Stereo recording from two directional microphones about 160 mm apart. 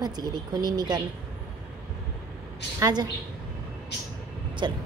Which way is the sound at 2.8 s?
25° right (ahead or behind).